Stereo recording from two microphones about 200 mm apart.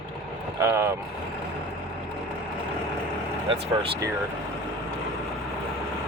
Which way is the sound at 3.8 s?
15° right (ahead or behind).